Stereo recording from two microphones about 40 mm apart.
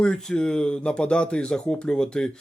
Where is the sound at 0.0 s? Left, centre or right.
Centre.